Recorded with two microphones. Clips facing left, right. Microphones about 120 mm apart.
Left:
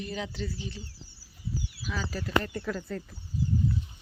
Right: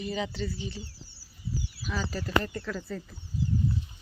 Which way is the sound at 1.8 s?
Centre (ahead or behind).